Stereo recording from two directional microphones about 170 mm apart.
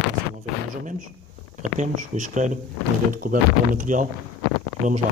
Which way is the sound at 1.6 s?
45° right (ahead or behind).